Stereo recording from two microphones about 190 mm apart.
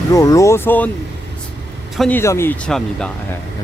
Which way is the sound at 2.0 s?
10° left (ahead or behind).